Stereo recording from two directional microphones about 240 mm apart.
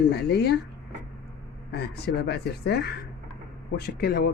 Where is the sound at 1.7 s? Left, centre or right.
Left.